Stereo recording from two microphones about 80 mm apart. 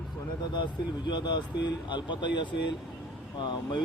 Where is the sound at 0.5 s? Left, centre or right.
Left.